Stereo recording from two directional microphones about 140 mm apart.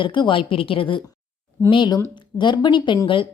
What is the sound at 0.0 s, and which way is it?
Speech, 35° left (ahead or behind).